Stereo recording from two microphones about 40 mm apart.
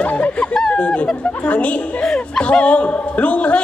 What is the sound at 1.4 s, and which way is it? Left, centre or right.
Speech, left.